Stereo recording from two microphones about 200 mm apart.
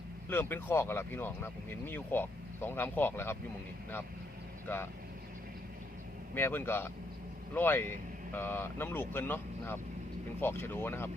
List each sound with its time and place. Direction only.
0.3 s speech: 10° left (ahead or behind)
4.6 s speech: 10° left (ahead or behind)
6.3 s speech: 10° left (ahead or behind)